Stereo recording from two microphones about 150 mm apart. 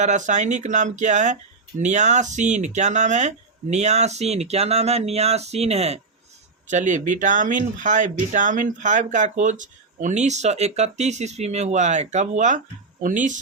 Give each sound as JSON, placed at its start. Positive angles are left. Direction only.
{"t": 0.0, "sound": "speech", "side_deg": -55}